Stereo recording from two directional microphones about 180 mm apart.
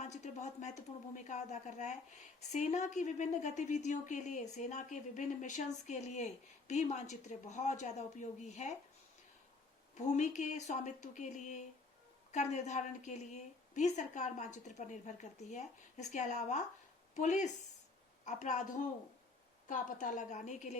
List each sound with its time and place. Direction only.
0.0 s a woman's voice: 40° left (ahead or behind)
9.9 s a woman's voice: 40° left (ahead or behind)